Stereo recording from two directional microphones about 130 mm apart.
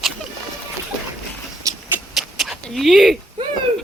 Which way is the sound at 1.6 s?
25° right (ahead or behind).